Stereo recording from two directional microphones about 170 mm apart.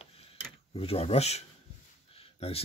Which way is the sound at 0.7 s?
35° left (ahead or behind).